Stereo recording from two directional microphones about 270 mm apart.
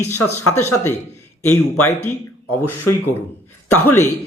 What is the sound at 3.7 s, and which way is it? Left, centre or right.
Speech, centre.